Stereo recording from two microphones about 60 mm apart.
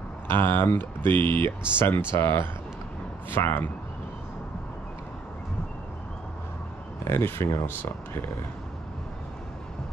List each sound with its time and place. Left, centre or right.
0.3 s speech: left
7.1 s speech: left